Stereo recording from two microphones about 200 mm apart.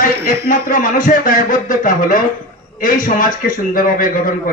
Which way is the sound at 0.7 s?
45° left (ahead or behind).